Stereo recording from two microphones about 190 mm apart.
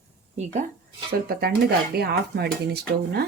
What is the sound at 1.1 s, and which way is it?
Dishes, 55° right (ahead or behind).